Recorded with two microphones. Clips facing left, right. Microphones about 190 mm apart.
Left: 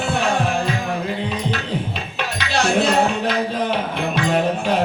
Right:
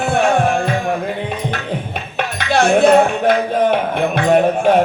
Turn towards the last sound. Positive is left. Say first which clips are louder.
# right 7 dB
turn(degrees=-50)  # may be behind; listen again after turning